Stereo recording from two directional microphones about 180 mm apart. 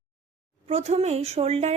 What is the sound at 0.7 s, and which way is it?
A woman's voice, 35° right (ahead or behind).